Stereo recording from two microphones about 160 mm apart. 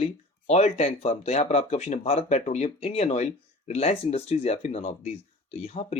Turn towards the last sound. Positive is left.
turn(degrees=40)  # may be behind; listen again after turning